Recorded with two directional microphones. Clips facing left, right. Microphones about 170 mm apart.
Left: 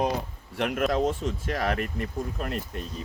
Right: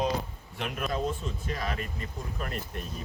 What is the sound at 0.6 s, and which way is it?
Speech, 70° left (ahead or behind).